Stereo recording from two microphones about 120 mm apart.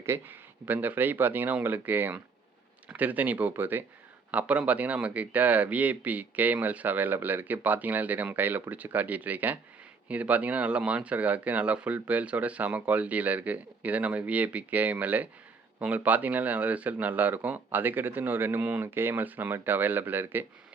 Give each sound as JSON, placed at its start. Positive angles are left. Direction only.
{"t": 0.0, "sound": "speech", "side_deg": -20}